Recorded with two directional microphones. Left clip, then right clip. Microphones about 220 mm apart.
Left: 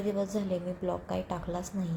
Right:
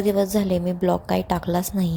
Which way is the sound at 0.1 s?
45° right (ahead or behind).